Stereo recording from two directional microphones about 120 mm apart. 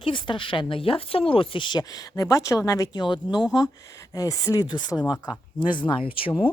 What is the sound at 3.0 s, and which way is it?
Speech, 40° left (ahead or behind).